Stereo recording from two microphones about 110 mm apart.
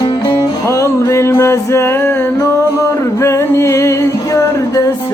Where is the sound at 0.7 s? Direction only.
25° left (ahead or behind).